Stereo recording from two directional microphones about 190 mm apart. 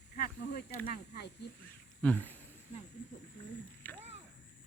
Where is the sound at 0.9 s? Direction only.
60° left (ahead or behind).